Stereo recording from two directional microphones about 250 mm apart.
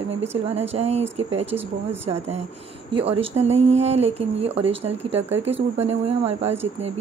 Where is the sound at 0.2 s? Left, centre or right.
Right.